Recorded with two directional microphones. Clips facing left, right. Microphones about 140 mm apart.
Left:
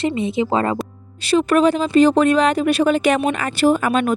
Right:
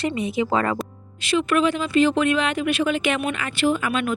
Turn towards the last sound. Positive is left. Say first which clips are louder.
# left 6 dB
turn(degrees=40)  # may be behind; listen again after turning